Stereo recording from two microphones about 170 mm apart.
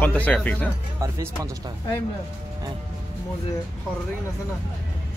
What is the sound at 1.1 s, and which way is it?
Speech, 20° right (ahead or behind).